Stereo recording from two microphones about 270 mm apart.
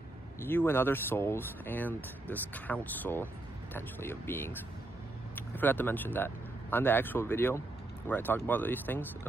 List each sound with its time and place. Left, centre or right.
0.4 s speech: centre